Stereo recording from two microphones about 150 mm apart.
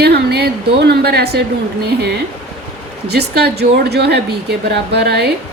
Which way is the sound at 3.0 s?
90° right.